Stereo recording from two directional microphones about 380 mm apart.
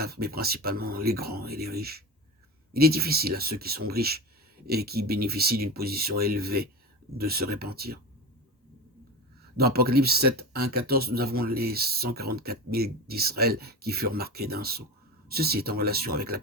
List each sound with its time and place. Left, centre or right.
0.0 s speech: right
9.6 s speech: right